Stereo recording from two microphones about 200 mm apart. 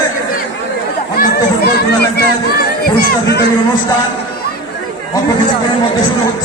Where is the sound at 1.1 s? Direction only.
45° left (ahead or behind).